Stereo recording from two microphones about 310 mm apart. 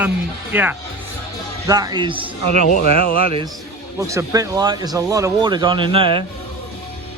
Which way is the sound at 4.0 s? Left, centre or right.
Centre.